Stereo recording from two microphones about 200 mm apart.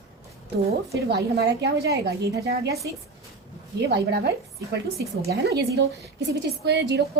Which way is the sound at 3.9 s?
55° right (ahead or behind).